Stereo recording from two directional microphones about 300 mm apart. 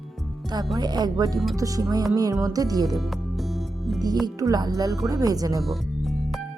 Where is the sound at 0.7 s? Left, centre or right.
Centre.